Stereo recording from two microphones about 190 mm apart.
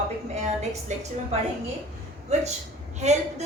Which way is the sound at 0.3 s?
35° right (ahead or behind).